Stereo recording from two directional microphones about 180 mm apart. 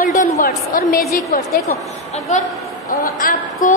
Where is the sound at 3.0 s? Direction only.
50° left (ahead or behind).